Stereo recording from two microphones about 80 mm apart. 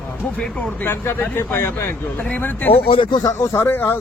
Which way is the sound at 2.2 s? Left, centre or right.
Left.